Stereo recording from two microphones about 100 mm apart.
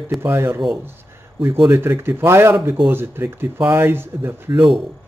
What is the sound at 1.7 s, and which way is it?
Speech, 25° right (ahead or behind).